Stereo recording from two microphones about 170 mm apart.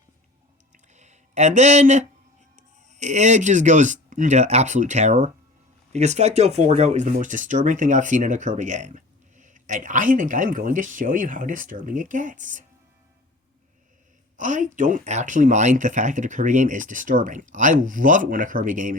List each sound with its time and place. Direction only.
0.7 s a sound: 45° right (ahead or behind)
2.6 s speech: 45° right (ahead or behind)
14.3 s speech: 45° right (ahead or behind)